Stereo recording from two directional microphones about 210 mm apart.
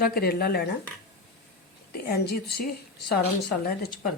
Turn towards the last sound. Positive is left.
turn(degrees=50)  # may be behind; listen again after turning